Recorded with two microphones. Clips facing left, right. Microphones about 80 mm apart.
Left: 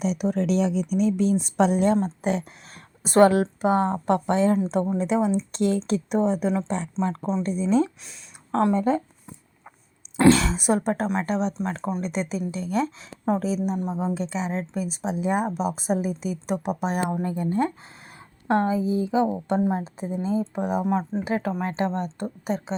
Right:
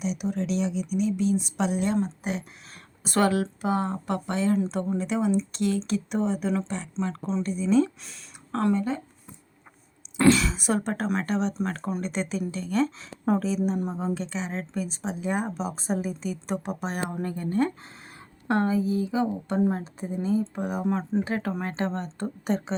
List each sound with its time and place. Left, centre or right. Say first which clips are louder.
0.0 s speech: left 5 dB; left
10.2 s a sound: left 3 dB; left
10.5 s speech: left 4 dB; left
13.7 s speech: left 1 dB; centre
14.1 s speech: left 3 dB; centre
20.8 s speech: left 2 dB; centre
21.2 s speech: left 3 dB; centre
22.4 s speech: right 1 dB; centre